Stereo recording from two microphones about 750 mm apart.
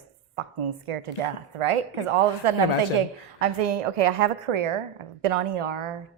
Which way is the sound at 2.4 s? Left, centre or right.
Right.